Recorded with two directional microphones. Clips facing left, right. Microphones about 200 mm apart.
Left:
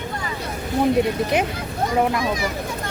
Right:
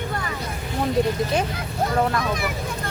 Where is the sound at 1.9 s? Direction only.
15° left (ahead or behind).